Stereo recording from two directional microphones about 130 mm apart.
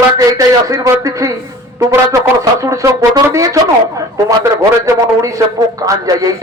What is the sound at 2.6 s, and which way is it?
Speech, 25° right (ahead or behind).